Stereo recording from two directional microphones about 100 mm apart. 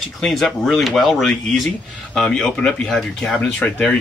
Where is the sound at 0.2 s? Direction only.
5° left (ahead or behind).